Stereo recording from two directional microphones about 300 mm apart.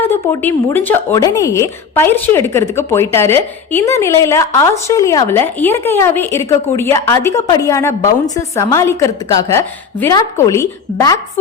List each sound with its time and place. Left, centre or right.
0.0 s speech: centre